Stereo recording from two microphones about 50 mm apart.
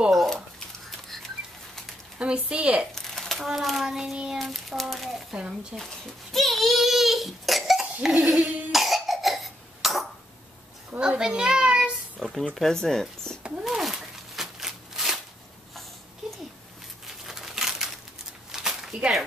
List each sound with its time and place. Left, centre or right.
0.1 s a sound: centre
2.1 s speech: right
2.9 s a sound: centre
3.6 s child singing: centre
4.4 s a child's voice: centre
5.3 s child singing: centre
5.8 s a child's voice: centre
8.7 s cough: centre
11.0 s a child's voice: centre
12.2 s a child's voice: centre
13.4 s a sound: centre
17.1 s a sound: centre